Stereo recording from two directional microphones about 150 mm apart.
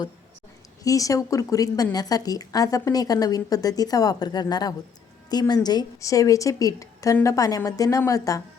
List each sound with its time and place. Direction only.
0.9 s speech: 20° left (ahead or behind)